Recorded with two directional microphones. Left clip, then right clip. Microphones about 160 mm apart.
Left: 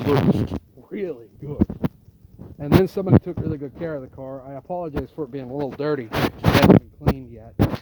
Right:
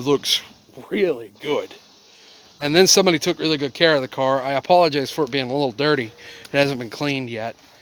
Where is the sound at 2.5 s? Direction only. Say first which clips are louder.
Right 6 dB; 45° right (ahead or behind); by 6.0 s 65° right (ahead or behind).